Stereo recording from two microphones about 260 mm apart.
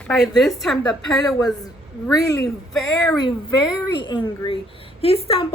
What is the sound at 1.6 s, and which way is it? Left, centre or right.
Speech, centre.